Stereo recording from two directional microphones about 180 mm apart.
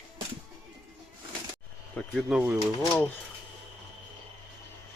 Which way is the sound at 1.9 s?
5° right (ahead or behind).